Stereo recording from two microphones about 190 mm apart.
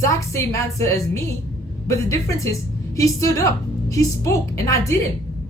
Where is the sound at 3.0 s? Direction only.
15° left (ahead or behind).